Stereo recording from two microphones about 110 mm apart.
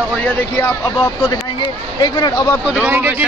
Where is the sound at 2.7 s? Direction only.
15° right (ahead or behind).